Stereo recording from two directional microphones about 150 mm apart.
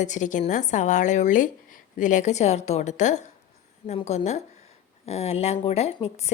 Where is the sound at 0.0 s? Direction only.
55° left (ahead or behind).